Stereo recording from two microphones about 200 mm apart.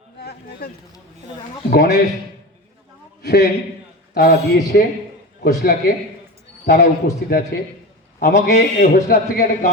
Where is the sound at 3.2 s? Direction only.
55° left (ahead or behind).